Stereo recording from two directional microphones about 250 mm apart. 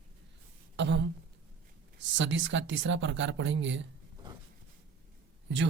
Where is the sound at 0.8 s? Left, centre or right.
Right.